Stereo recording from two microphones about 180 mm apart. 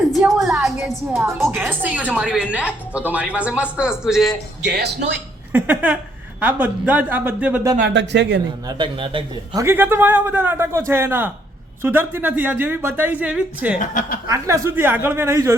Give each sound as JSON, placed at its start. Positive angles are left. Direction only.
{"t": 0.1, "sound": "a woman's voice", "side_deg": 0}
{"t": 1.5, "sound": "a woman's voice", "side_deg": -10}
{"t": 4.6, "sound": "speech", "side_deg": -65}
{"t": 5.5, "sound": "a woman's voice", "side_deg": -10}
{"t": 7.9, "sound": "speech", "side_deg": -75}
{"t": 8.6, "sound": "a man's voice", "side_deg": -30}
{"t": 9.6, "sound": "a woman's voice", "side_deg": -10}
{"t": 13.7, "sound": "speech", "side_deg": 45}
{"t": 14.3, "sound": "a woman's voice", "side_deg": -15}